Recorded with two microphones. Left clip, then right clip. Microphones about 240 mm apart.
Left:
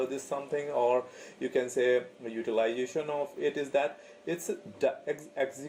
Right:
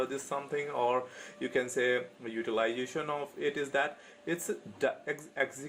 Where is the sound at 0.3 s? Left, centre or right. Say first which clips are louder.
Left 2 dB; right.